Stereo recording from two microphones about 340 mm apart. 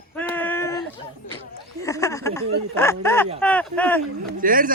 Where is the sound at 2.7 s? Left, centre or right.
Centre.